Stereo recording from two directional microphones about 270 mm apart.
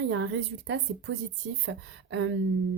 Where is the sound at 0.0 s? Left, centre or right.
Right.